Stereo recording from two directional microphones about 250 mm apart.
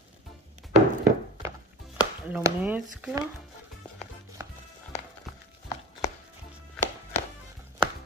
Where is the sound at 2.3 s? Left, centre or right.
Centre.